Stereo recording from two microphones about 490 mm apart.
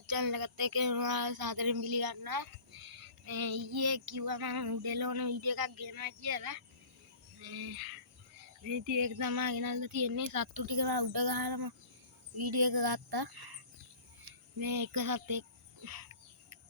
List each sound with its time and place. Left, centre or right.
0.1 s child singing: right
8.6 s child singing: right
14.6 s a child's voice: right